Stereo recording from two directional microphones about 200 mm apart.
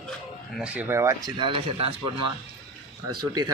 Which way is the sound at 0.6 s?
5° right (ahead or behind).